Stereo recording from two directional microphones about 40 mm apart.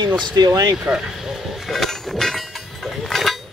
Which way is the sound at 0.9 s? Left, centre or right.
Right.